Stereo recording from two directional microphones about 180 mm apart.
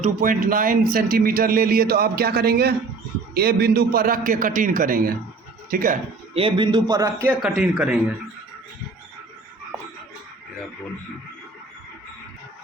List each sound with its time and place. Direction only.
0.0 s a man's voice: 50° right (ahead or behind)
6.3 s a man's voice: 30° right (ahead or behind)
7.4 s speech: centre (ahead or behind)